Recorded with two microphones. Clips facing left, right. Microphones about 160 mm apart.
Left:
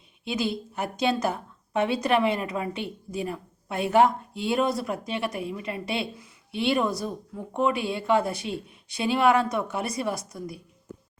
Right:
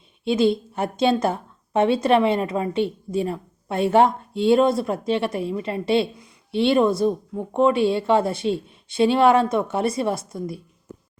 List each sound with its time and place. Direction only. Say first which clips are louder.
0.3 s a woman's voice: right 9 dB; 25° right (ahead or behind)